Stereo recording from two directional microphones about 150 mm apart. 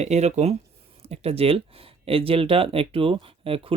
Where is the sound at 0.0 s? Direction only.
50° right (ahead or behind).